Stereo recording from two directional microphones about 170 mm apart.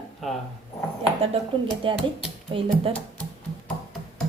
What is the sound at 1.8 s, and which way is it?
Speech, 30° right (ahead or behind).